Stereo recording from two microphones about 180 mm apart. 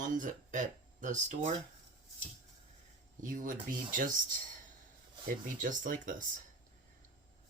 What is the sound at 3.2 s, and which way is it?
Speech, 50° right (ahead or behind).